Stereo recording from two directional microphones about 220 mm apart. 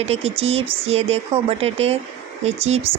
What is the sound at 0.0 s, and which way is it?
Speech, 30° right (ahead or behind).